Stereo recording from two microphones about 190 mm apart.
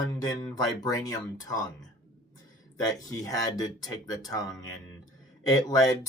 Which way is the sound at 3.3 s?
20° left (ahead or behind).